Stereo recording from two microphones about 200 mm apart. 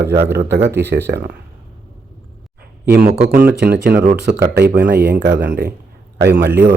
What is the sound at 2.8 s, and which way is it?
Speech, 55° right (ahead or behind).